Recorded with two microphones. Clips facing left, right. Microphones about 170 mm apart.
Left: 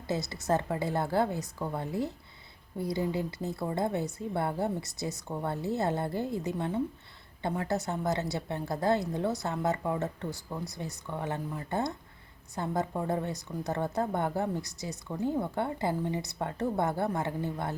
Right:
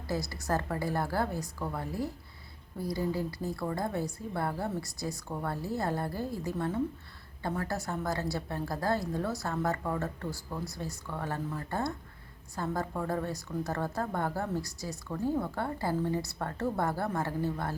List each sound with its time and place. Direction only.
0.1 s a woman's voice: 20° left (ahead or behind)